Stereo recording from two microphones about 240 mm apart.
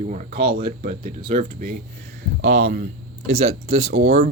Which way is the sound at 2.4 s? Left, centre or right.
Right.